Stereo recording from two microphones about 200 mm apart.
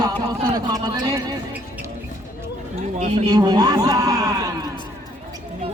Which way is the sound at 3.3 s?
20° right (ahead or behind).